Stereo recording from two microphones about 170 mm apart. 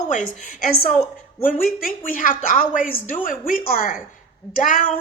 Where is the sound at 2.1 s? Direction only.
55° left (ahead or behind).